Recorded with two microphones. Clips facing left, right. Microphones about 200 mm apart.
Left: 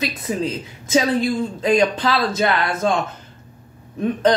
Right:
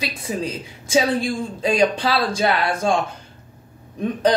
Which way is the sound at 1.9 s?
10° right (ahead or behind).